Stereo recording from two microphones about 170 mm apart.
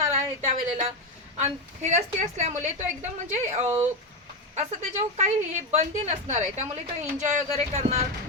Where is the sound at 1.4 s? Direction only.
40° right (ahead or behind).